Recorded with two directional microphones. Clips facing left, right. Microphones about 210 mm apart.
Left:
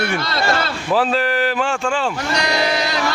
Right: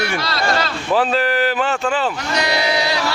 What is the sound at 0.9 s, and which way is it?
Speech, centre (ahead or behind).